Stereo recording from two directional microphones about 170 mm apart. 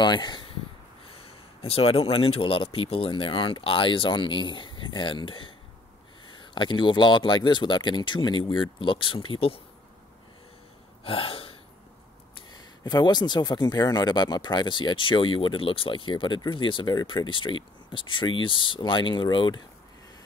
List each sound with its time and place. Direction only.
0.0 s speech: 25° left (ahead or behind)
6.5 s speech: 25° left (ahead or behind)
11.1 s gasp: 30° left (ahead or behind)
12.4 s speech: 25° left (ahead or behind)